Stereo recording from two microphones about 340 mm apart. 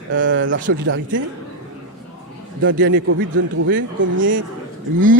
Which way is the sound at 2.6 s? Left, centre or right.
Right.